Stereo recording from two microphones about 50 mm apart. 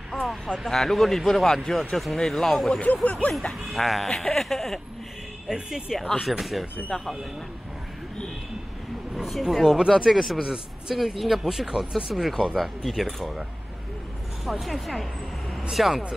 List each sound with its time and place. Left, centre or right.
0.1 s a sound: centre
0.7 s speech: centre
2.7 s speech: left
3.4 s speech: centre
5.5 s a man's voice: centre
6.2 s speech: centre
9.1 s a man's voice: centre
10.0 s speech: centre
10.4 s a man's voice: centre
11.0 s speech: centre
14.4 s speech: centre